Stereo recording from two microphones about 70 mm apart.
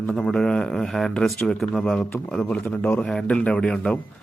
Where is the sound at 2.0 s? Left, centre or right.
Left.